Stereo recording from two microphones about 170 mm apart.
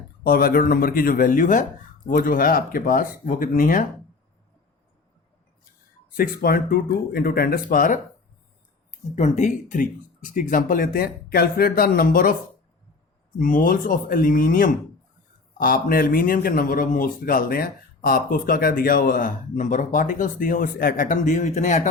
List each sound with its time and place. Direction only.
0.3 s a man's voice: 60° left (ahead or behind)
6.1 s a man's voice: 60° left (ahead or behind)
9.1 s a man's voice: 45° left (ahead or behind)
13.4 s a man's voice: 50° left (ahead or behind)